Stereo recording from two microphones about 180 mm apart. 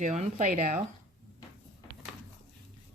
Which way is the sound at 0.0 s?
45° right (ahead or behind).